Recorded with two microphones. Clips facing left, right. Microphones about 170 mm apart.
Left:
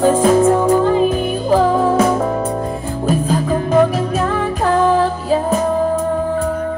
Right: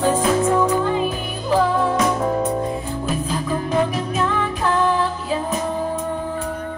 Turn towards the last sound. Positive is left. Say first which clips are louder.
# left 7 dB
turn(degrees=45)  # may be behind; listen again after turning